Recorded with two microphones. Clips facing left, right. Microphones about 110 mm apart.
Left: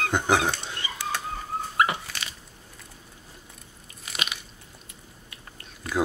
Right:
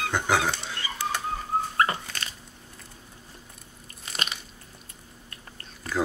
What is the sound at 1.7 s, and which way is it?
Dog, 10° left (ahead or behind).